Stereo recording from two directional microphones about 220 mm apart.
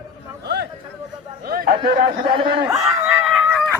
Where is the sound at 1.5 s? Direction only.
40° right (ahead or behind).